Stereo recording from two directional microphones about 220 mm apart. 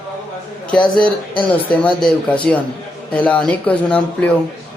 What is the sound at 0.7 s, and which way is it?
Speech, 5° left (ahead or behind).